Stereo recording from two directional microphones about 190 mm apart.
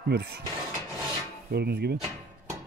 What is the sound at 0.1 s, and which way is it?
Speech, 60° right (ahead or behind).